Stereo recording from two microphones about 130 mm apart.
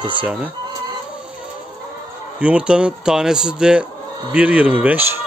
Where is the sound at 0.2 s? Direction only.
10° right (ahead or behind).